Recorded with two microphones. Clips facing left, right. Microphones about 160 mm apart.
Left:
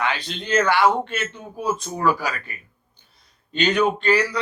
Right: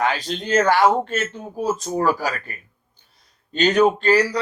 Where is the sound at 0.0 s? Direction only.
40° right (ahead or behind).